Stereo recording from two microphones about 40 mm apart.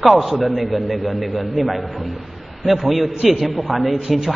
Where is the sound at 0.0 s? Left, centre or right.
Centre.